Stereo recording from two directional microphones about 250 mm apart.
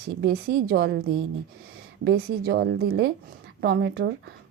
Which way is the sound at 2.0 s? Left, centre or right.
Right.